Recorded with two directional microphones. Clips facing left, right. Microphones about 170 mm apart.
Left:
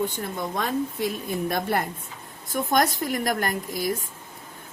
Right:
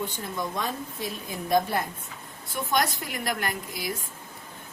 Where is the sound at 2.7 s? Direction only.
45° left (ahead or behind).